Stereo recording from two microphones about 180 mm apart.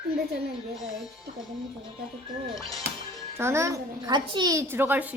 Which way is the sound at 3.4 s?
15° right (ahead or behind).